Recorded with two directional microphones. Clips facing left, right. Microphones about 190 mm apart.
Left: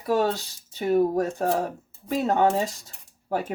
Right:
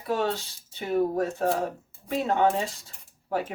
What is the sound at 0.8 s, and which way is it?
Speech, 40° left (ahead or behind).